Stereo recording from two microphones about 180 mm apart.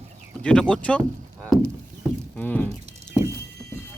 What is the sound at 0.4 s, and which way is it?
Speech, 5° left (ahead or behind).